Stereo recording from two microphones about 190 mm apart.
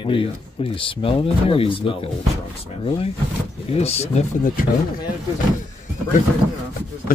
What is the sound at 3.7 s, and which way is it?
Speech, 30° left (ahead or behind).